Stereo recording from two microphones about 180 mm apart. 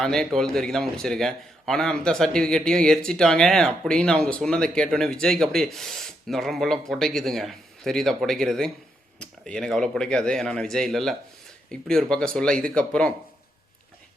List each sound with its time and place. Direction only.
0.0 s speech: centre (ahead or behind)